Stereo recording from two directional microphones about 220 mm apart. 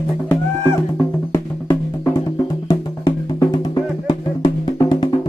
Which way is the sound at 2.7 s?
20° left (ahead or behind).